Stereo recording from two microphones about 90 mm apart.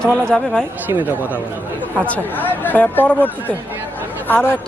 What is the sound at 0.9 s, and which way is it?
Speech, 25° right (ahead or behind).